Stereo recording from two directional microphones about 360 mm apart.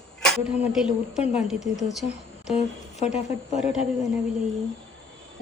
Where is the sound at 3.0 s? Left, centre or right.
Centre.